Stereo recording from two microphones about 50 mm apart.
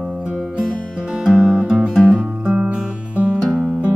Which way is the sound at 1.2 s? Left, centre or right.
Centre.